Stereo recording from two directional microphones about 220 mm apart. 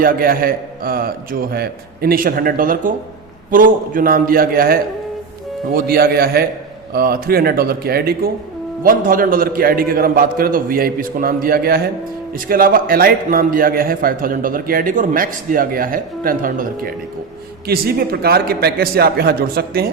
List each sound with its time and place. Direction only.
0.0 s a man's voice: 40° right (ahead or behind)